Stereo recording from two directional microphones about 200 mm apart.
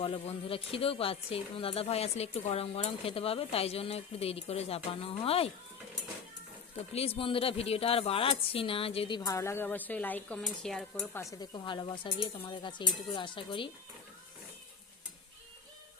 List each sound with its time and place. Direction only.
0.0 s a woman's voice: 30° left (ahead or behind)
6.9 s a woman's voice: 30° left (ahead or behind)